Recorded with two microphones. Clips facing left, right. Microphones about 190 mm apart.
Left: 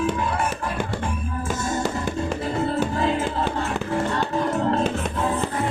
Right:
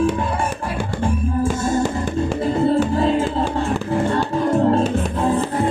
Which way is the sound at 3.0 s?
30° right (ahead or behind).